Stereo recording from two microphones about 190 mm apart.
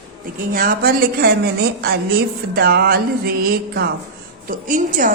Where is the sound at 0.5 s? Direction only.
50° right (ahead or behind).